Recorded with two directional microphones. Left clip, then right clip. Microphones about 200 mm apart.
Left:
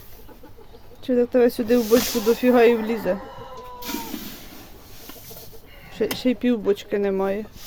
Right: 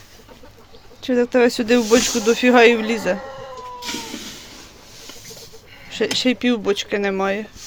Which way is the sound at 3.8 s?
65° left (ahead or behind).